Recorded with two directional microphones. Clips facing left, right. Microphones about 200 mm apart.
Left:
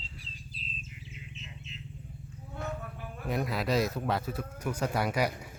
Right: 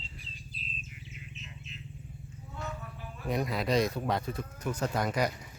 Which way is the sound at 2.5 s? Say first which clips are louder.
Left 3 dB; 55° left (ahead or behind).